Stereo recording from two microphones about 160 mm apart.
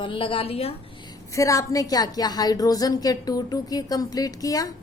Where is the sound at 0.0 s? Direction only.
35° left (ahead or behind).